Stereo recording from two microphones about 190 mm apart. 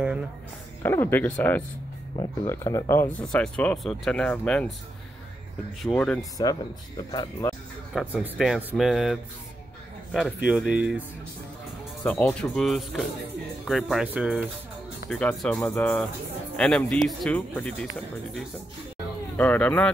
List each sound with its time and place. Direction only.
0.8 s speech: 10° left (ahead or behind)
5.8 s speech: 5° left (ahead or behind)
6.3 s speech: 20° left (ahead or behind)
8.1 s speech: 5° right (ahead or behind)
12.0 s speech: 5° left (ahead or behind)
15.0 s speech: 5° left (ahead or behind)